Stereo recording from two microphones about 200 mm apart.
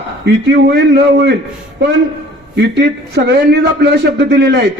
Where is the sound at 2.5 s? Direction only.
55° right (ahead or behind).